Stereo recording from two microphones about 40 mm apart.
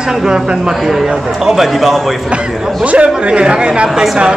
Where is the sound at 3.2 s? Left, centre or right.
Right.